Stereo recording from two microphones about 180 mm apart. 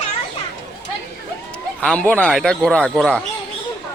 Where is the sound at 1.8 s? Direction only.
5° left (ahead or behind).